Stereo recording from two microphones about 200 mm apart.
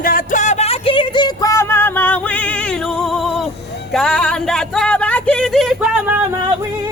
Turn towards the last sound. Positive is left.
turn(degrees=-5)  # may be behind; listen again after turning